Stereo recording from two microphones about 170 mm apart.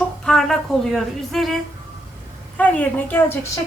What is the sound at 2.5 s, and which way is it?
Speech, 10° left (ahead or behind).